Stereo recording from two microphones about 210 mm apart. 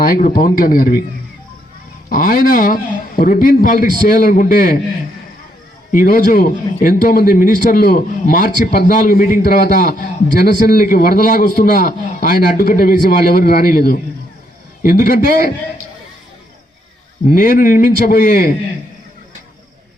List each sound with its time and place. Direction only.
0.0 s a man's voice: 40° left (ahead or behind)
2.0 s a man's voice: 40° left (ahead or behind)
5.9 s a man's voice: 40° left (ahead or behind)
17.2 s a man's voice: 45° left (ahead or behind)